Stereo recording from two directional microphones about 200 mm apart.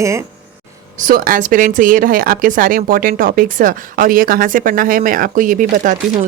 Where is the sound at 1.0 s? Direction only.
45° right (ahead or behind).